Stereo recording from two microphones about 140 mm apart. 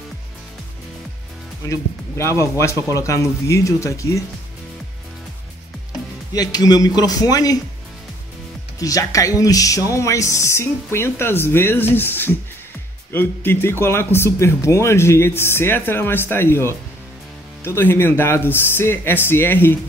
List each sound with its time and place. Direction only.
1.7 s speech: 20° left (ahead or behind)
6.3 s speech: 25° left (ahead or behind)
8.7 s speech: 25° left (ahead or behind)